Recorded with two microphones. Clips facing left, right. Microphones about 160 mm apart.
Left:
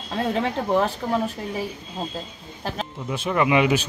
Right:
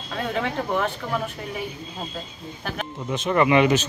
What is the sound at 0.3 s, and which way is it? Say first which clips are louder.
Speech: left 3 dB; 30° left (ahead or behind).